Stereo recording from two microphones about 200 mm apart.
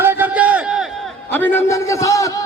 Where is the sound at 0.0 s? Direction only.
10° right (ahead or behind).